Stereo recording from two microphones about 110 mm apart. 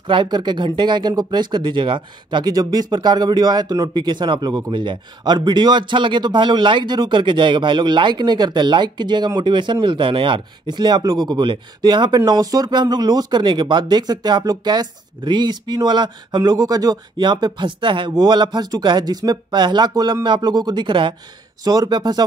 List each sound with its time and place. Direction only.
0.1 s speech: 45° right (ahead or behind)